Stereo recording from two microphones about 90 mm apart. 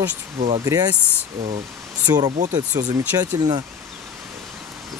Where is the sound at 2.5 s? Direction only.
45° right (ahead or behind).